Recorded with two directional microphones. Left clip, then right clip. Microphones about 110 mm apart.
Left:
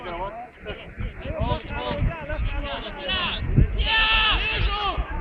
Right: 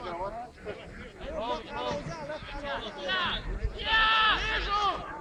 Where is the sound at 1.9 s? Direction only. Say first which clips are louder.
Left 5 dB; 55° right (ahead or behind).